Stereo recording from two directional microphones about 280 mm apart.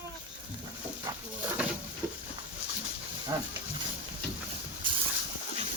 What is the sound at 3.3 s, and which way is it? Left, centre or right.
Speech, centre.